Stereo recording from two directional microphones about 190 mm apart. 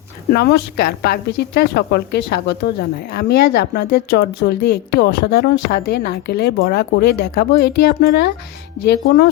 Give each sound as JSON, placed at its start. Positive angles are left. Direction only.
{"t": 0.3, "sound": "speech", "side_deg": 55}